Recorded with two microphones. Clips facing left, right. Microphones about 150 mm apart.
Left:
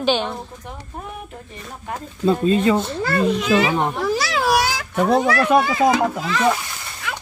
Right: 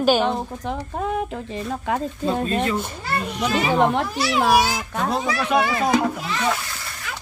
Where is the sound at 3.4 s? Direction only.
90° left; by 5.5 s 65° left (ahead or behind).